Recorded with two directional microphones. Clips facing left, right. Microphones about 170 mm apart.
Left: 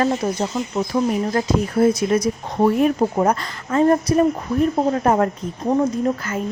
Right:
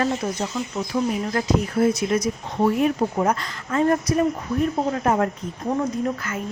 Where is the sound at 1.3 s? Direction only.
35° left (ahead or behind).